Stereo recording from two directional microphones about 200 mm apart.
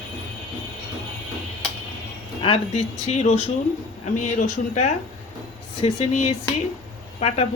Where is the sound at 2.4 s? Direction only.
30° left (ahead or behind).